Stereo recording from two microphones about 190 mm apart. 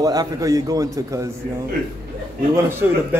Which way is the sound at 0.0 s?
20° right (ahead or behind).